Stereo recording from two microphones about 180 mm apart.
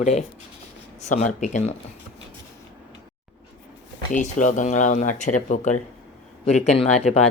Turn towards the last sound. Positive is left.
turn(degrees=35)  # may be behind; listen again after turning